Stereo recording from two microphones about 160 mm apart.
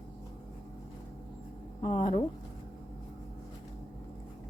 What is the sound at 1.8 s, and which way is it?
Speech, 30° left (ahead or behind).